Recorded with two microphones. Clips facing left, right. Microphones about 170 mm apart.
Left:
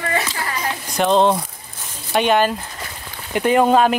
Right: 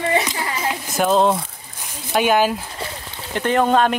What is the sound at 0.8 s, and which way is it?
Speech, 5° right (ahead or behind).